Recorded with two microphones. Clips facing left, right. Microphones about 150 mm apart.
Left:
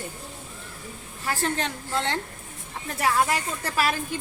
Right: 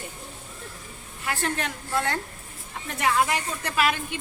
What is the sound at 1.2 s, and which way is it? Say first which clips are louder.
Speech: left 1 dB; 35° left (ahead or behind).